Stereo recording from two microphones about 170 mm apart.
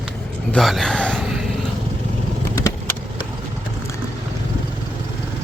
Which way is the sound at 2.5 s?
20° left (ahead or behind).